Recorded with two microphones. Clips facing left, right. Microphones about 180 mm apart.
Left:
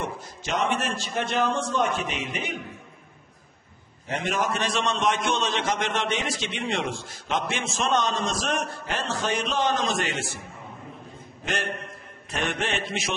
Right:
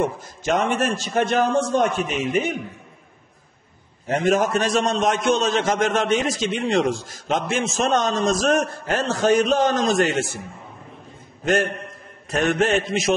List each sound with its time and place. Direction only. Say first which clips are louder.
0.0 s a man's voice: right 9 dB; 50° right (ahead or behind)
4.1 s a man's voice: right 8 dB; 45° right (ahead or behind)
11.4 s a man's voice: right 9 dB; 45° right (ahead or behind)